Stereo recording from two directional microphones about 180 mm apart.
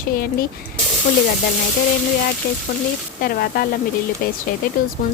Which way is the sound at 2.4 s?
60° left (ahead or behind).